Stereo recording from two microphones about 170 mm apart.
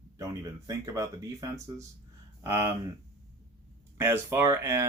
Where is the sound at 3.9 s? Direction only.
15° right (ahead or behind).